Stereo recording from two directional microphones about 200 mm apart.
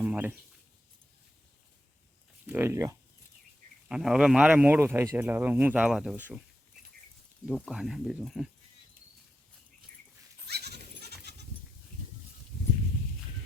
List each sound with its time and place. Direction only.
0.0 s a sound: 10° right (ahead or behind)
2.5 s speech: 10° right (ahead or behind)
3.8 s speech: 5° right (ahead or behind)
7.4 s speech: centre (ahead or behind)
10.5 s goat: 55° right (ahead or behind)